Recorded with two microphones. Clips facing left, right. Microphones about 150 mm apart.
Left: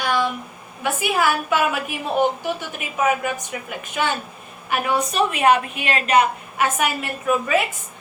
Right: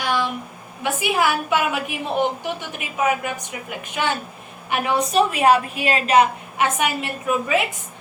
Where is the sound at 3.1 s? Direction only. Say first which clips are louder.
Left 2 dB; 15° right (ahead or behind).